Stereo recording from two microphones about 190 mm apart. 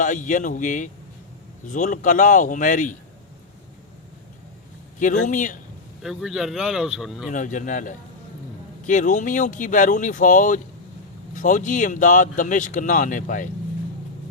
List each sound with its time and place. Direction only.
0.0 s speech: 40° left (ahead or behind)
5.2 s a man's voice: 40° left (ahead or behind)
6.0 s speech: centre (ahead or behind)
7.3 s speech: 40° left (ahead or behind)